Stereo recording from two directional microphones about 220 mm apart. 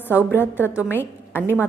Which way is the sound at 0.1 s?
5° right (ahead or behind).